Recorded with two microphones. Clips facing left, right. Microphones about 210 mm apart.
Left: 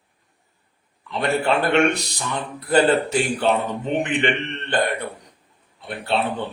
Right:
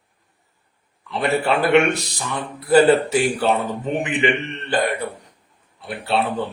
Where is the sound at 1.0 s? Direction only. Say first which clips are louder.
Right 1 dB; 5° right (ahead or behind).